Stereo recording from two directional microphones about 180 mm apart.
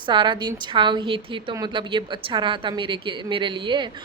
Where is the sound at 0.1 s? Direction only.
25° right (ahead or behind).